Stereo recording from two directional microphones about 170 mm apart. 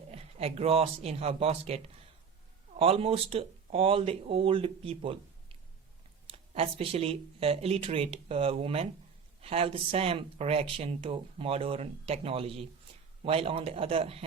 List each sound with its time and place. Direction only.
0.1 s speech: 35° right (ahead or behind)